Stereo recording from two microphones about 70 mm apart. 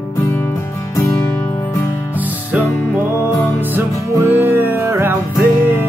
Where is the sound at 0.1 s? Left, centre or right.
Left.